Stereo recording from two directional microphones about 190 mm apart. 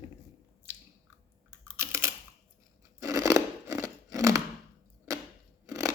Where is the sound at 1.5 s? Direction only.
15° right (ahead or behind).